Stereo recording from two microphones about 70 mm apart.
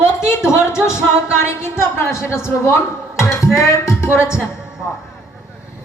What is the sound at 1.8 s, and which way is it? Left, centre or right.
Speech, left.